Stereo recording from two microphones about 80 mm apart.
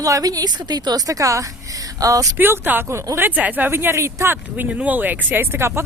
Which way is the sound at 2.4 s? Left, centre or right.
Right.